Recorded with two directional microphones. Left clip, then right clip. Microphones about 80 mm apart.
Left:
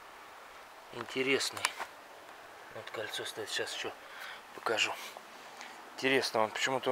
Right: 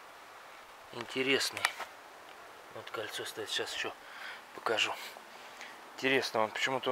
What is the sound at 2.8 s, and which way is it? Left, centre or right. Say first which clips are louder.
Speech: even; right.